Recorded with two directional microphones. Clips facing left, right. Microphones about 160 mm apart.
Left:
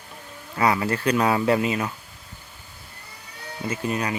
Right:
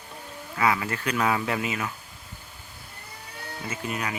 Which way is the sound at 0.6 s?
35° left (ahead or behind).